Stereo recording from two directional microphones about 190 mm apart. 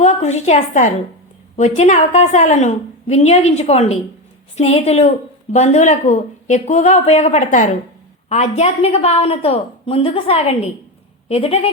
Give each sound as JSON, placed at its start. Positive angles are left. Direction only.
{"t": 0.0, "sound": "a woman's voice", "side_deg": 35}